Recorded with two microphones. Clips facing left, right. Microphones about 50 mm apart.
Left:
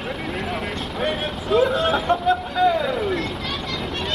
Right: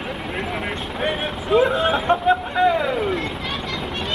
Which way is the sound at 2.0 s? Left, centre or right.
Right.